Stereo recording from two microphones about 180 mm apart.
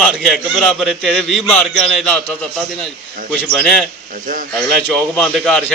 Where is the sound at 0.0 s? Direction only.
Centre (ahead or behind).